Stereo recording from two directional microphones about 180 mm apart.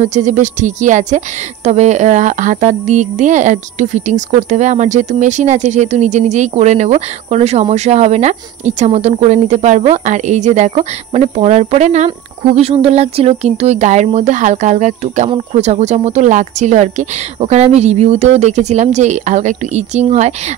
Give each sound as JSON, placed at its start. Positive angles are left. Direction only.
{"t": 0.0, "sound": "speech", "side_deg": -40}